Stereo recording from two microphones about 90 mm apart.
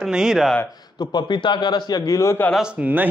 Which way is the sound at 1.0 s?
55° left (ahead or behind).